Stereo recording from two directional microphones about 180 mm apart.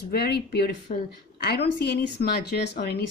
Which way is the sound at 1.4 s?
60° left (ahead or behind).